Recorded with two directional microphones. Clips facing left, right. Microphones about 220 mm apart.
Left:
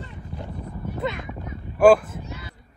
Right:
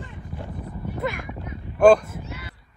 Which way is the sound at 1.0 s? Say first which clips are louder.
Even; 25° left (ahead or behind).